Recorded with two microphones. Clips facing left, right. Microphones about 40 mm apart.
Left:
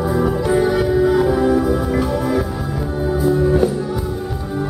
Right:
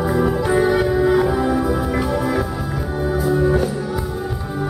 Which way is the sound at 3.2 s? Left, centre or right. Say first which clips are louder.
Left 2 dB; centre.